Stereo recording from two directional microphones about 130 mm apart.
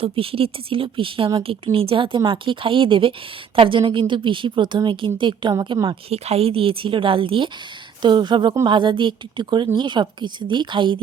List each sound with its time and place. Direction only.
0.0 s a woman's voice: 45° right (ahead or behind)
6.1 s a woman's voice: 50° right (ahead or behind)